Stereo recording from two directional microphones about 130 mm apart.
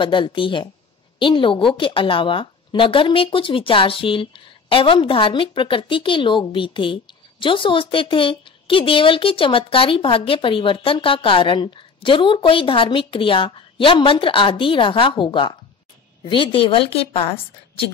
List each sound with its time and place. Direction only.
0.0 s a woman's voice: 40° left (ahead or behind)